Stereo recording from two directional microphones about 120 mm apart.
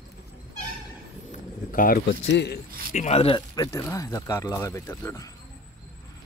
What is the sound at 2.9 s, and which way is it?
Speech, 90° left.